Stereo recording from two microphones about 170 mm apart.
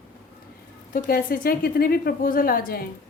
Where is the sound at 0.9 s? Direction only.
60° left (ahead or behind).